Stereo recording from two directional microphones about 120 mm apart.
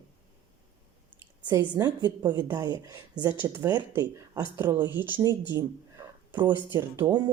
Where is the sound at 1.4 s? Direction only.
35° right (ahead or behind).